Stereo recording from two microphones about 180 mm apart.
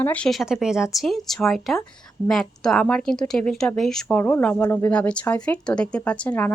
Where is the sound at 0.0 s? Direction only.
5° left (ahead or behind).